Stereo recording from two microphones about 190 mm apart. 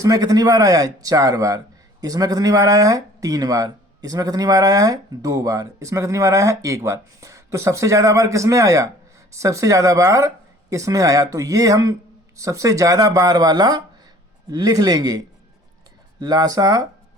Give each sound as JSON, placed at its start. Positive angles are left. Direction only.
{"t": 0.0, "sound": "speech", "side_deg": -20}
{"t": 16.2, "sound": "speech", "side_deg": -20}